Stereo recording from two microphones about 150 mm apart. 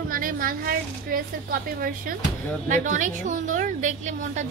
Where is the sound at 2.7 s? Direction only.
55° right (ahead or behind).